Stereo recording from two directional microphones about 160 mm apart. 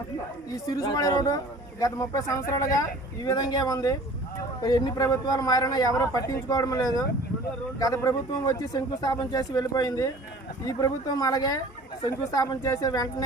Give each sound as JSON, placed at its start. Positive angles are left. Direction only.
{"t": 0.5, "sound": "a man's voice", "side_deg": 20}